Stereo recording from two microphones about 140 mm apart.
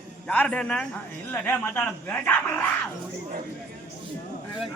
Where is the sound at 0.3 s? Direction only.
10° left (ahead or behind).